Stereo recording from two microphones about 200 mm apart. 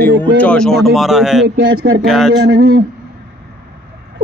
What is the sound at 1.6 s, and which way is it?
Speech, 75° right (ahead or behind).